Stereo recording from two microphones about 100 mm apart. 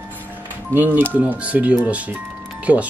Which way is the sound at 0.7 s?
20° right (ahead or behind).